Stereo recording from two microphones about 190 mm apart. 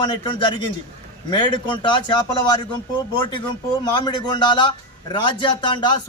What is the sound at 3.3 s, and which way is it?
A man's voice, 25° left (ahead or behind).